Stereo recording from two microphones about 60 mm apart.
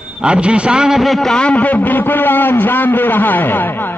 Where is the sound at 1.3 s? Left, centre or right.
Centre.